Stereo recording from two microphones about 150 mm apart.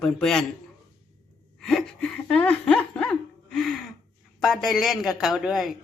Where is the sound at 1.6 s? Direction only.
5° left (ahead or behind).